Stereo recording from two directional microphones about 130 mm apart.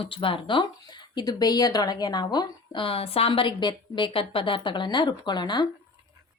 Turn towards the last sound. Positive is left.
turn(degrees=35)  # may be behind; listen again after turning